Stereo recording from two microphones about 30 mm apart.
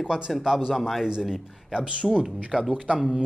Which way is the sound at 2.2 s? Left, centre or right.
Centre.